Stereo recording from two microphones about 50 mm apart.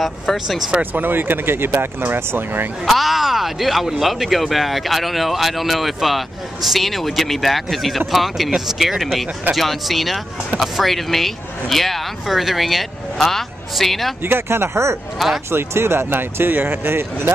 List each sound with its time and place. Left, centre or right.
0.0 s speech: centre
0.9 s speech: right
2.8 s speech: centre
14.2 s speech: right
15.1 s speech: centre
15.5 s speech: right